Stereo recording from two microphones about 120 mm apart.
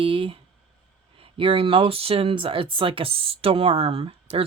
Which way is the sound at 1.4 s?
50° right (ahead or behind).